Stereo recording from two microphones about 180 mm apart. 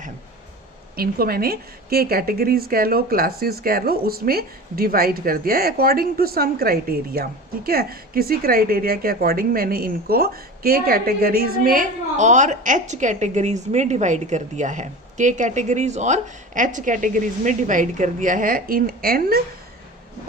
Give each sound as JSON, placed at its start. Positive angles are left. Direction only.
{"t": 0.9, "sound": "a woman's voice", "side_deg": -55}